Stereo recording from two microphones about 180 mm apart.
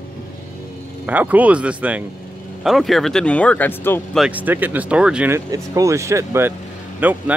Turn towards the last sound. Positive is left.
turn(degrees=-10)  # may be behind; listen again after turning